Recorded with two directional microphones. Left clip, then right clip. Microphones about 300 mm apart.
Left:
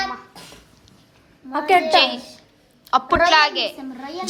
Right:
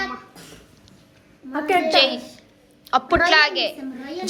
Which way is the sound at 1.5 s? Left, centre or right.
Left.